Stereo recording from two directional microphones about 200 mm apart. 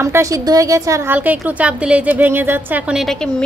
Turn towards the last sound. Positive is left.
turn(degrees=0)  # may be behind; listen again after turning